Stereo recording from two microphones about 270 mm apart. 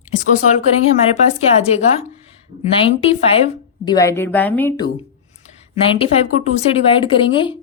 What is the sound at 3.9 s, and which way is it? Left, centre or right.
Speech, centre.